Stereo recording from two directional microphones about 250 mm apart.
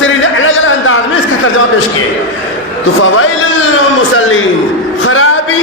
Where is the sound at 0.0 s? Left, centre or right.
Left.